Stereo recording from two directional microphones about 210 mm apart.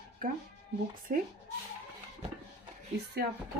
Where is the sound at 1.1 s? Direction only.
40° right (ahead or behind).